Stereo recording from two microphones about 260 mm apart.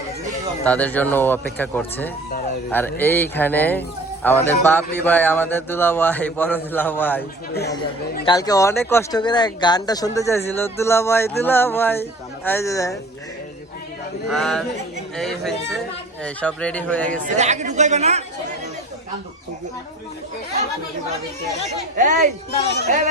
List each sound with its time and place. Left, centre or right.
0.6 s speech: centre
14.3 s speech: centre
17.1 s a man's voice: right
21.9 s a man's voice: right